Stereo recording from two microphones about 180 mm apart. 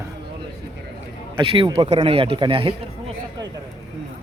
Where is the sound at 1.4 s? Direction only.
30° right (ahead or behind).